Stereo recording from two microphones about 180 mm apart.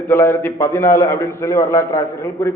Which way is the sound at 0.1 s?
15° left (ahead or behind).